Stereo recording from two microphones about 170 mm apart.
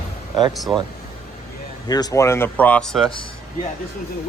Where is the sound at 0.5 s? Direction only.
Centre (ahead or behind).